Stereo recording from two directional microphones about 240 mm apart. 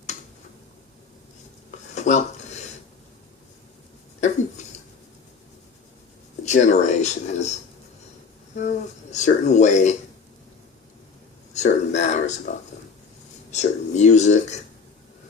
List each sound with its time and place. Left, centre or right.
2.0 s dishes: left
6.4 s speech: left
8.5 s speech: left
11.5 s speech: left